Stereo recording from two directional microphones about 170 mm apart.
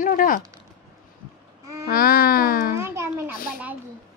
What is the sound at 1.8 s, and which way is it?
Speech, 60° left (ahead or behind).